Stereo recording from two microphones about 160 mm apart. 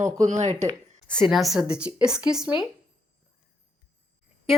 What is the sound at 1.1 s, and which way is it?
A woman's voice, centre (ahead or behind).